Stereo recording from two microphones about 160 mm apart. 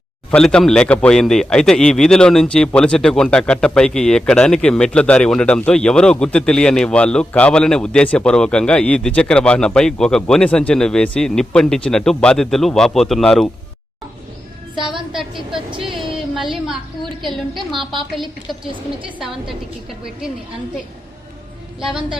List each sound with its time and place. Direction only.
0.3 s a man's voice: 5° left (ahead or behind)
14.8 s a woman's voice: 30° right (ahead or behind)
15.1 s a woman's voice: 5° right (ahead or behind)
15.8 s a sound: centre (ahead or behind)
17.7 s a woman's voice: centre (ahead or behind)
19.2 s a man's voice: centre (ahead or behind)